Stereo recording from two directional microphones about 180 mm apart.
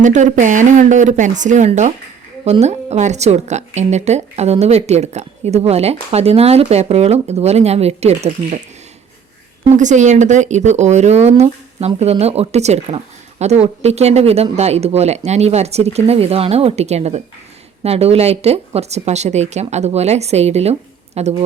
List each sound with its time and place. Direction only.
0.0 s speech: 40° right (ahead or behind)
9.6 s speech: 40° right (ahead or behind)